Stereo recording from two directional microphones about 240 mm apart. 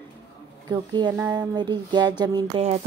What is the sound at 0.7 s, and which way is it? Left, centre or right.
A woman's voice, centre.